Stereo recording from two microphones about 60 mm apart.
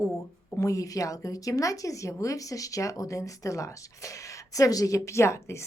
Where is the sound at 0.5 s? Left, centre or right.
Left.